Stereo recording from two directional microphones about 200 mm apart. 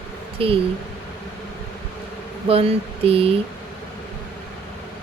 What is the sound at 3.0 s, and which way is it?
Speech, 30° right (ahead or behind).